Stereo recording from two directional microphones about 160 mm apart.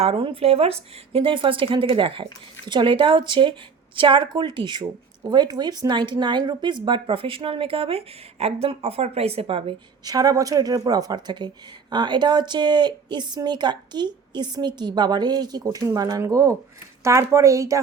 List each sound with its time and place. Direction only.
0.0 s a woman's voice: 35° right (ahead or behind); by 17.7 s 20° right (ahead or behind)